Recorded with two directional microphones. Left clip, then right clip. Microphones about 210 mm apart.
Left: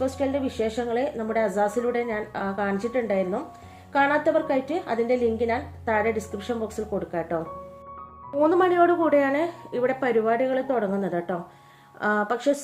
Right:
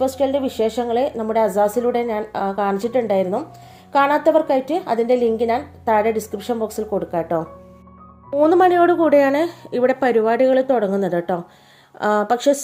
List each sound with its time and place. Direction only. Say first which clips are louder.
0.0 s a woman's voice: right 7 dB; 35° right (ahead or behind)